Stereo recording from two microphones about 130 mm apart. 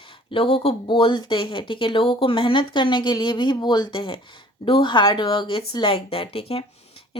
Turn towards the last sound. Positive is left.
turn(degrees=50)  # may be behind; listen again after turning